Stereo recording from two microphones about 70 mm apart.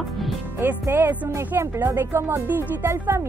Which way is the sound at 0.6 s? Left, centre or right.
Right.